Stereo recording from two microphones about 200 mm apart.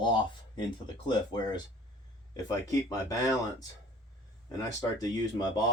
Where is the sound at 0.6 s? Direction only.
20° left (ahead or behind).